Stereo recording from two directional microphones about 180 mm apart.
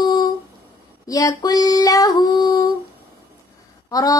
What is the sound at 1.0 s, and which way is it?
Speech, 20° left (ahead or behind).